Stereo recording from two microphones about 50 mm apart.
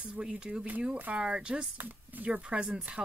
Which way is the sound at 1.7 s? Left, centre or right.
Right.